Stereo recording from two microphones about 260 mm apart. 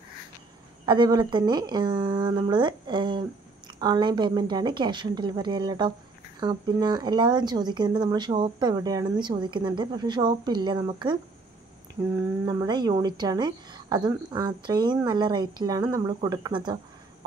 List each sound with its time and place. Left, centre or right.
0.8 s a woman's voice: centre